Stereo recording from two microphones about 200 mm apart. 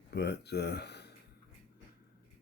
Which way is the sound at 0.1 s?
55° left (ahead or behind).